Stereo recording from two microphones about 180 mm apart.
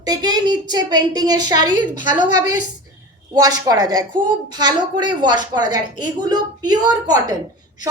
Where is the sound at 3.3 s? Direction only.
20° right (ahead or behind).